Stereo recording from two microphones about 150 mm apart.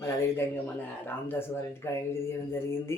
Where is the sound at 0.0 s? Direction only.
15° left (ahead or behind).